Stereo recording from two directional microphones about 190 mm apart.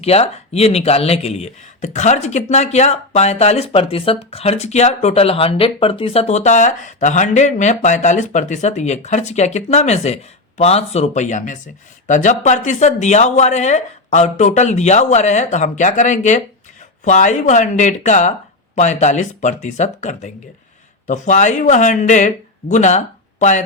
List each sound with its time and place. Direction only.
0.0 s speech: 35° left (ahead or behind)